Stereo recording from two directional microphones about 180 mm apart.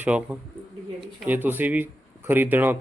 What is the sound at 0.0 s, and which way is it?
A man's voice, 5° right (ahead or behind).